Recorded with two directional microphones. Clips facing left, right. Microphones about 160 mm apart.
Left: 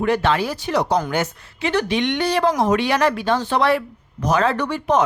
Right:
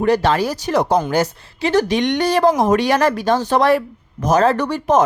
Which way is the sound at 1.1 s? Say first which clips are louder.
Right 5 dB; 35° right (ahead or behind).